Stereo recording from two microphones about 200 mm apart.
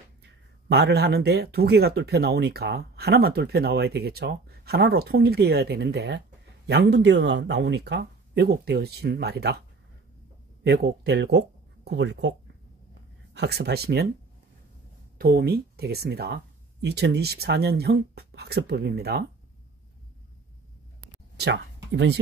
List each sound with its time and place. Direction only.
0.2 s speech: 55° right (ahead or behind)
10.6 s speech: 55° right (ahead or behind)
15.1 s speech: 50° right (ahead or behind)
21.9 s speech: 60° right (ahead or behind)